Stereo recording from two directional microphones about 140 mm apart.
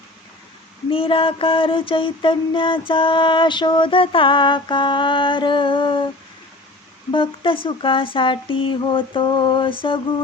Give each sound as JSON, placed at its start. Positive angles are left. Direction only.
{"t": 0.9, "sound": "mantra", "side_deg": 40}
{"t": 7.1, "sound": "mantra", "side_deg": 40}